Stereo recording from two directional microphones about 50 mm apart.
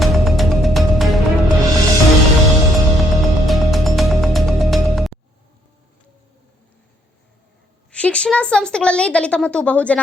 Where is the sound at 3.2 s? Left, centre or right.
Centre.